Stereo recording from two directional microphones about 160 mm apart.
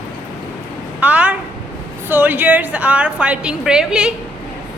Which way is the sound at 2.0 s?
10° right (ahead or behind).